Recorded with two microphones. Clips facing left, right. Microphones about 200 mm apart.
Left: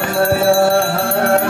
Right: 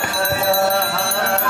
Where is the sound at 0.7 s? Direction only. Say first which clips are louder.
Left 6 dB; 50° left (ahead or behind).